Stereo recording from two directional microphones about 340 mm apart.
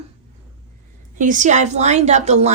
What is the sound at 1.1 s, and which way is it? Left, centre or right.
Speech, right.